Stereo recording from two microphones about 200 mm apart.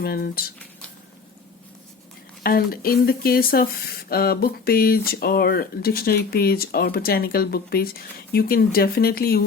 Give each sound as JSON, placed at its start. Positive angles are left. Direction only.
{"t": 0.0, "sound": "speech", "side_deg": 50}
{"t": 2.4, "sound": "speech", "side_deg": 50}